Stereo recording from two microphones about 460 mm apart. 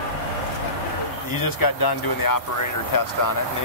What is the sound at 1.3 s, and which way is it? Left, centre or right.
Speech, left.